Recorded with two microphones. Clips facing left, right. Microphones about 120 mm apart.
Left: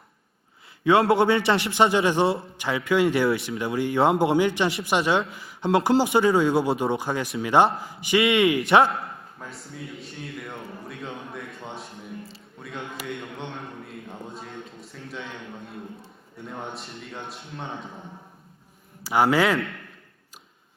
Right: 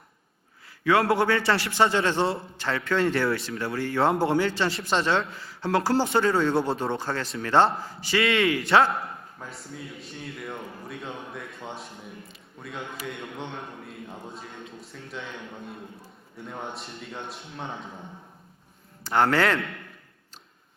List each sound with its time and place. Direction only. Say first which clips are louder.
0.9 s a man's voice: left 3 dB; 25° left (ahead or behind)
9.4 s a man's voice: left 2 dB; centre (ahead or behind)
16.3 s speech: left 1 dB; centre (ahead or behind)
19.0 s speech: left 2 dB; 10° left (ahead or behind)